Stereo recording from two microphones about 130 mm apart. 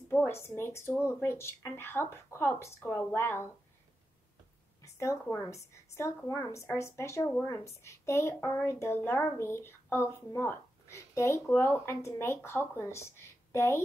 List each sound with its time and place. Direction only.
0.1 s a woman's voice: 20° left (ahead or behind)
4.8 s a woman's voice: 20° left (ahead or behind)